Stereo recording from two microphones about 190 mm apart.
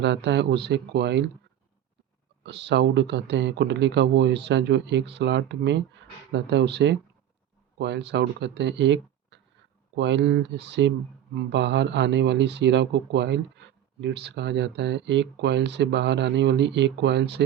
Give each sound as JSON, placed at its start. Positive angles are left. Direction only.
{"t": 0.0, "sound": "speech", "side_deg": -65}
{"t": 2.4, "sound": "speech", "side_deg": -65}